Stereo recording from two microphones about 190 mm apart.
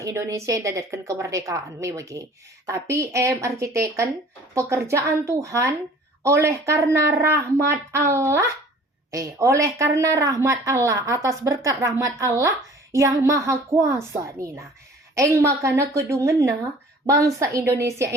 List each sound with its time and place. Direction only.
0.0 s a woman's voice: 15° right (ahead or behind)